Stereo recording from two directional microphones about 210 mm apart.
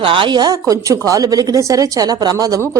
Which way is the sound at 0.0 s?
25° right (ahead or behind).